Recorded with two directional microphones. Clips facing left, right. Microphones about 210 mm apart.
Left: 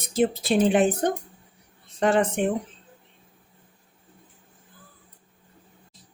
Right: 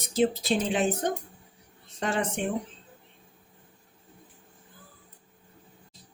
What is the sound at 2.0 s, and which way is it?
Speech, 55° left (ahead or behind).